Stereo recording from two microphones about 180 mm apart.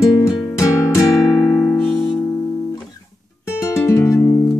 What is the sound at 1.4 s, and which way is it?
Music, 5° left (ahead or behind).